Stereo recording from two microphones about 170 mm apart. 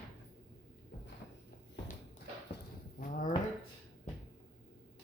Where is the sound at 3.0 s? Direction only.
50° left (ahead or behind).